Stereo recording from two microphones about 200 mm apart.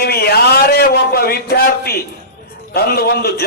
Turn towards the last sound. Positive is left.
turn(degrees=50)  # may be behind; listen again after turning